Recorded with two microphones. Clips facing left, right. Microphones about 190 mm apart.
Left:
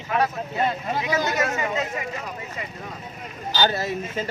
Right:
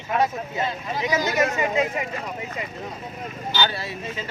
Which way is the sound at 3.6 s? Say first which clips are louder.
Left 4 dB; 45° left (ahead or behind).